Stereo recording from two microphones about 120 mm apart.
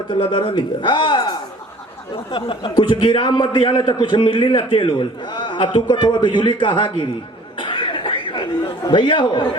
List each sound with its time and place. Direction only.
0.1 s a man's voice: 45° left (ahead or behind)
7.6 s cough: 45° left (ahead or behind)